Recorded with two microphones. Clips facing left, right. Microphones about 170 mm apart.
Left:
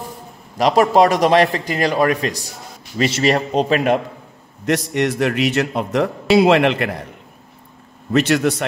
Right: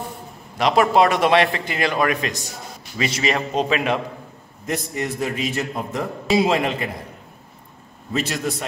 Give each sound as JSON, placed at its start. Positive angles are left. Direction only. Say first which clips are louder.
{"t": 0.6, "sound": "a man's voice", "louder": "left 3 dB", "side_deg": 40}
{"t": 4.6, "sound": "a man's voice", "louder": "left 7 dB", "side_deg": 80}
{"t": 8.1, "sound": "a man's voice", "louder": "left 8 dB", "side_deg": 70}